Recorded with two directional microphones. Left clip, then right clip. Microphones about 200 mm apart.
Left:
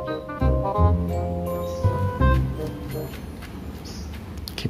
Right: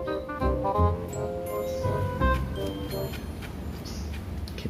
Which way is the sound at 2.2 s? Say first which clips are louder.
Left 2 dB; centre (ahead or behind).